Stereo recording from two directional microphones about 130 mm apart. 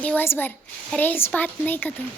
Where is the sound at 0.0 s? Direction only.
15° left (ahead or behind).